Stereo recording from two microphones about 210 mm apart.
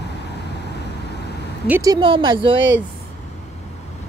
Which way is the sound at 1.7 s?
15° right (ahead or behind).